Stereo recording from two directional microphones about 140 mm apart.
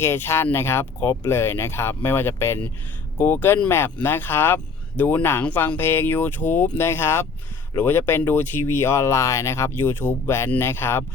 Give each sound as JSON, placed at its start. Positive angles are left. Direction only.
{"t": 0.0, "sound": "speech", "side_deg": 15}